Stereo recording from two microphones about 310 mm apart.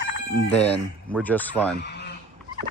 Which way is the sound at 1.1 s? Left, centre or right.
Centre.